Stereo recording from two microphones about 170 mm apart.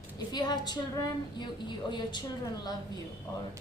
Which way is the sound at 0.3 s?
25° left (ahead or behind).